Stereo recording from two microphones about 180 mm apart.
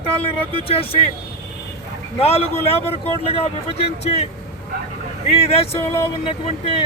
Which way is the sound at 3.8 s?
35° left (ahead or behind).